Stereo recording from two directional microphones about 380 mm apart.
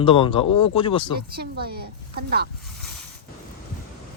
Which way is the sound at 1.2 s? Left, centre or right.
Right.